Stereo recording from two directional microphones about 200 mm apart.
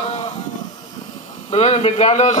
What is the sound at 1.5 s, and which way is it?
Speech, 30° left (ahead or behind).